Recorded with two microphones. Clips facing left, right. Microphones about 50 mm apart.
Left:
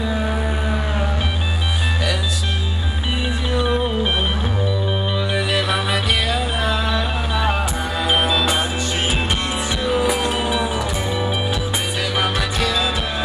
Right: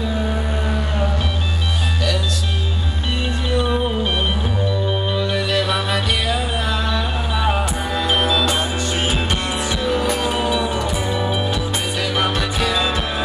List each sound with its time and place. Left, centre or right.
0.3 s music: centre
3.4 s music: centre
5.1 s music: centre